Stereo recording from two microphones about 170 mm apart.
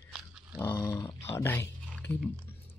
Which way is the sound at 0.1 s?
5° right (ahead or behind).